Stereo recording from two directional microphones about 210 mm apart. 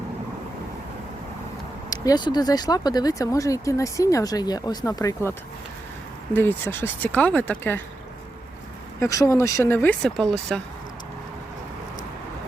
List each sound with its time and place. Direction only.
1.9 s speech: 20° left (ahead or behind)
6.3 s speech: 10° left (ahead or behind)
9.0 s speech: 15° left (ahead or behind)